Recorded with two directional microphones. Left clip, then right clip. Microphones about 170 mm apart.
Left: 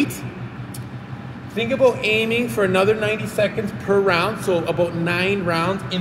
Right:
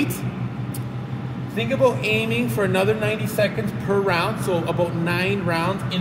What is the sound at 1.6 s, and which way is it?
A woman's voice, 15° left (ahead or behind).